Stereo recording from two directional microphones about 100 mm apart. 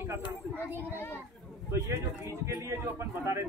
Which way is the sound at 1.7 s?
30° right (ahead or behind).